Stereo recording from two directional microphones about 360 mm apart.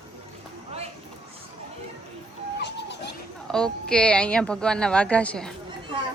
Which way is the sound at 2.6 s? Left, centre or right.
Left.